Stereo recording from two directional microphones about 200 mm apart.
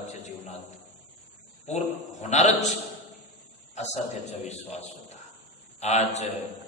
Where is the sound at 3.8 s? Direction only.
35° left (ahead or behind).